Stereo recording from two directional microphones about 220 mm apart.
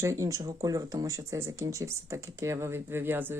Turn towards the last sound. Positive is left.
turn(degrees=-10)  # may be behind; listen again after turning